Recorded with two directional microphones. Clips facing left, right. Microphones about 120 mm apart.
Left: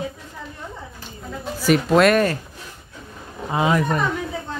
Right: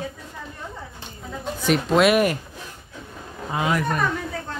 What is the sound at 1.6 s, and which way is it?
Speech, centre (ahead or behind).